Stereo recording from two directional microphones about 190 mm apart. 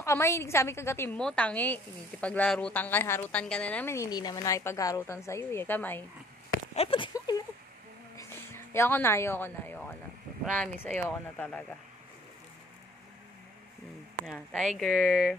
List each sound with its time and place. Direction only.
0.0 s a woman's voice: 15° left (ahead or behind)
6.7 s speech: 30° left (ahead or behind)
7.2 s a sound: 20° left (ahead or behind)
8.2 s a woman's voice: 15° left (ahead or behind)
14.2 s speech: centre (ahead or behind)